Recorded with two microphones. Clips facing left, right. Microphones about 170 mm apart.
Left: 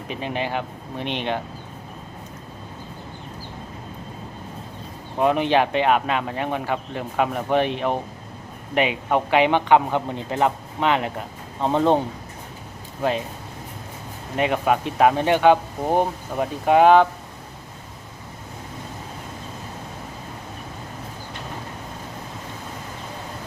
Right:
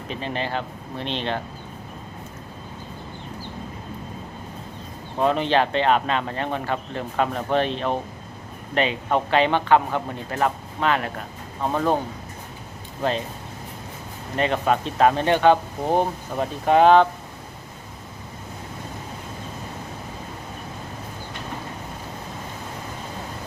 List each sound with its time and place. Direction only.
0.1 s speech: 15° left (ahead or behind)
5.2 s speech: 15° left (ahead or behind)
13.0 s speech: 10° left (ahead or behind)
14.3 s speech: 10° left (ahead or behind)